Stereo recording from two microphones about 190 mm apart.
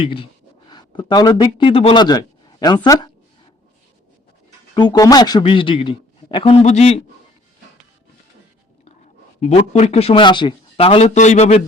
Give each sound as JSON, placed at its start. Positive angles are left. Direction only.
{"t": 0.0, "sound": "a man's voice", "side_deg": 30}
{"t": 4.7, "sound": "a man's voice", "side_deg": 20}
{"t": 9.4, "sound": "speech", "side_deg": 35}